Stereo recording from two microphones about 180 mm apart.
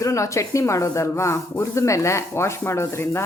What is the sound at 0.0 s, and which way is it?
Speech, 15° left (ahead or behind).